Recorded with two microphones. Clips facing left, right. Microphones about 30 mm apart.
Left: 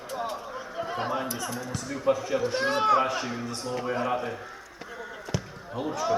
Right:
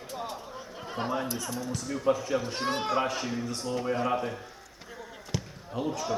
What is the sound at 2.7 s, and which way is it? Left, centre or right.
Speech, centre.